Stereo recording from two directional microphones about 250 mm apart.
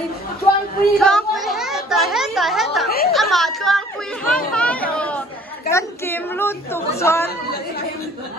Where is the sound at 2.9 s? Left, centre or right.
Left.